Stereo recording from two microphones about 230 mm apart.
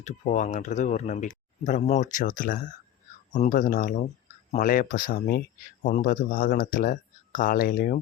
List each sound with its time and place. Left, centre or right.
0.0 s speech: left